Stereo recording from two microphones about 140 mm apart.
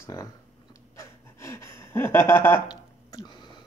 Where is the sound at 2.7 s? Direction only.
30° left (ahead or behind).